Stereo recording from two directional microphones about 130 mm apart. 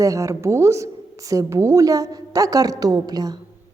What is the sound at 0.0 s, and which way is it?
A woman's voice, 25° right (ahead or behind).